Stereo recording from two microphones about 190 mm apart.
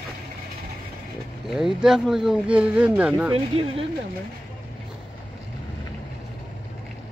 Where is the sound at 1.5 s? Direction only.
5° right (ahead or behind).